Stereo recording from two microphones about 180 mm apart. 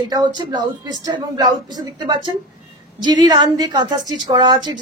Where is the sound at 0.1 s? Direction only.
25° right (ahead or behind).